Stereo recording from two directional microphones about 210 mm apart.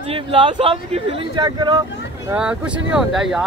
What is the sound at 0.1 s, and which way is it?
Speech, 25° right (ahead or behind).